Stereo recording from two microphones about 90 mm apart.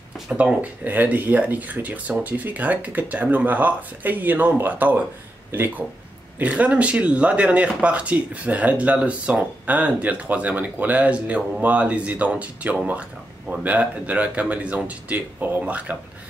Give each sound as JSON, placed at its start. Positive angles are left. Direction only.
{"t": 0.3, "sound": "speech", "side_deg": -10}